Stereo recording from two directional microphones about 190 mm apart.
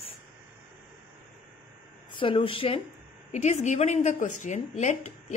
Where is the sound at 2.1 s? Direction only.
30° left (ahead or behind).